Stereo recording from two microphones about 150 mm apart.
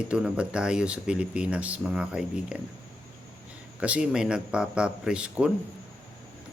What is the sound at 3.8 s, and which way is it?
Speech, 10° right (ahead or behind).